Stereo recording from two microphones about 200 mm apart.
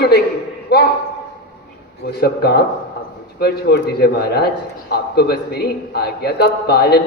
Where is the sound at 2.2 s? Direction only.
55° left (ahead or behind).